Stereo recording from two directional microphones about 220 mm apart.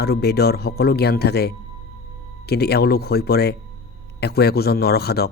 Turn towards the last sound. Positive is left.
turn(degrees=45)  # may be behind; listen again after turning